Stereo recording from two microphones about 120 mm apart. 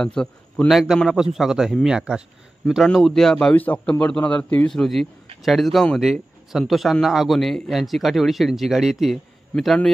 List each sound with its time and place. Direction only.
0.0 s a man's voice: 5° left (ahead or behind)
9.5 s a man's voice: 10° left (ahead or behind)